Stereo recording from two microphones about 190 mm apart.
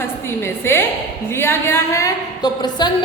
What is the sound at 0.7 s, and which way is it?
A woman's voice, 15° left (ahead or behind).